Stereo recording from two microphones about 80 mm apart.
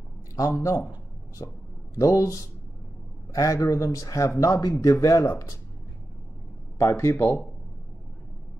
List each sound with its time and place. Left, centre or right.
0.6 s speech: left
2.0 s speech: left
6.8 s speech: left